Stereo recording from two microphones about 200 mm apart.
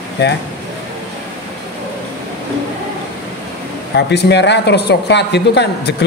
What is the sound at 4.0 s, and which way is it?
Speech, 60° left (ahead or behind).